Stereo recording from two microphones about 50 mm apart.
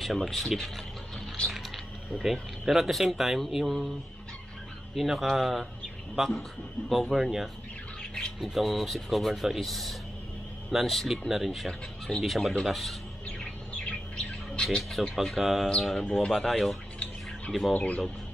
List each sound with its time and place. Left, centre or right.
0.0 s speech: centre
2.6 s speech: centre
4.9 s speech: centre
6.9 s speech: centre
8.0 s squawk: centre
8.4 s speech: centre
13.4 s bird: left
14.8 s a man's voice: centre
17.7 s speech: left